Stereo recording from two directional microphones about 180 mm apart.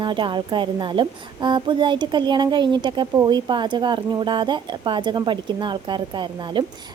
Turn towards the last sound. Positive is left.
turn(degrees=-25)  # may be behind; listen again after turning